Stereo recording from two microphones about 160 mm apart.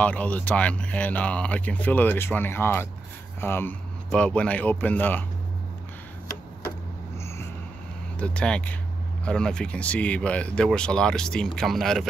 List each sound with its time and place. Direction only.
0.0 s speech: 10° left (ahead or behind)
7.2 s a sound: 15° left (ahead or behind)
8.2 s speech: 5° left (ahead or behind)